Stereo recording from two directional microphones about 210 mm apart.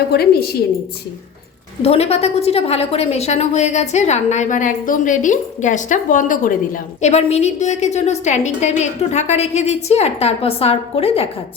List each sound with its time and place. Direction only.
0.1 s a woman's voice: 50° left (ahead or behind)
1.8 s a woman's voice: 30° left (ahead or behind)